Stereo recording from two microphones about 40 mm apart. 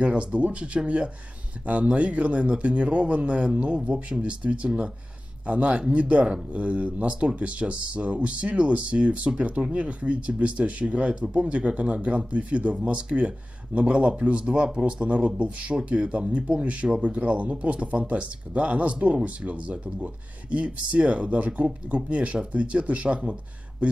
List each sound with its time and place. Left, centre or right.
0.0 s speech: right